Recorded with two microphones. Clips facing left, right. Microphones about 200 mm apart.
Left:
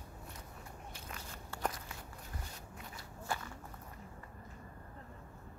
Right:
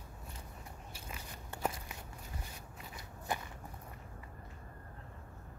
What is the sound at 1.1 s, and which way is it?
Walk, 15° right (ahead or behind).